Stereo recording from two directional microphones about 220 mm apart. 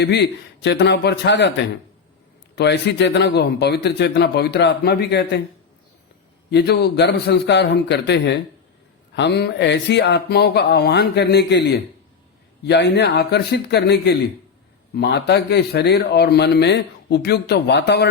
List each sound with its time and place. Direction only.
0.0 s speech: 50° left (ahead or behind)
2.6 s speech: 50° left (ahead or behind)
6.5 s speech: 50° left (ahead or behind)